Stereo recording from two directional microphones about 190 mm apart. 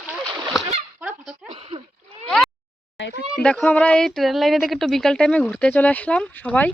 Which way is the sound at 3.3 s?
5° left (ahead or behind).